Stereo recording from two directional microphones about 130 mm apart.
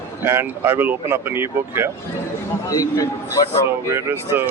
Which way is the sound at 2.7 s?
25° left (ahead or behind).